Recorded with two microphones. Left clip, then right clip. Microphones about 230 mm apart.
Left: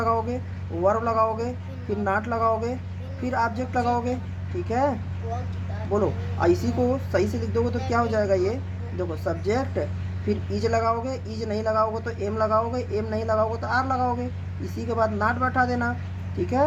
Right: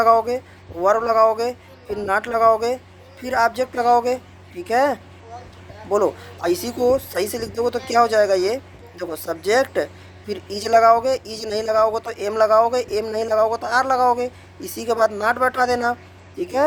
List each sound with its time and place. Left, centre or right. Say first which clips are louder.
0.0 s speech: right 9 dB; right
6.5 s speech: right 7 dB; right